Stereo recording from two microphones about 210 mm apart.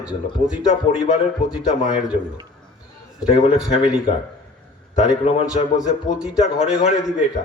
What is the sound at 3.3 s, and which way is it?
Speech, 30° left (ahead or behind).